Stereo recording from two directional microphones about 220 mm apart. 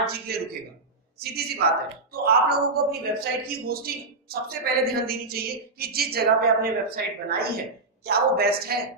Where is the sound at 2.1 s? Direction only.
45° right (ahead or behind).